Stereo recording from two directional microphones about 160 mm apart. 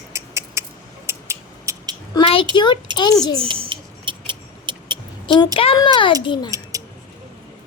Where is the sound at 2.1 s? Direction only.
35° left (ahead or behind).